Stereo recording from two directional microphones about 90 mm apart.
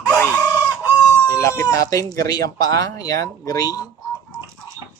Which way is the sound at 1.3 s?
35° left (ahead or behind).